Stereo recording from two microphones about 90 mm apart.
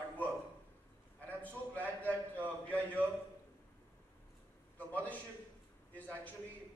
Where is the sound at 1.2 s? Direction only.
15° left (ahead or behind).